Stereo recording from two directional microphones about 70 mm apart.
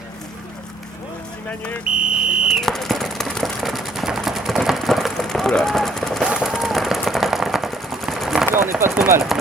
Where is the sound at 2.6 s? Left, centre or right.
Centre.